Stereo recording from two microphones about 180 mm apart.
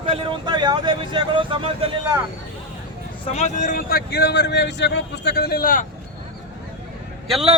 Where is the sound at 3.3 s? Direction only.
40° left (ahead or behind).